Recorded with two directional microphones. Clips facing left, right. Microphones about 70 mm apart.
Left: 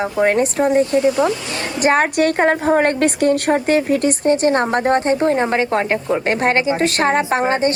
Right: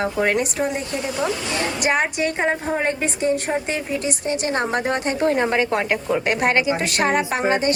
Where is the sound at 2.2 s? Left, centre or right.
Left.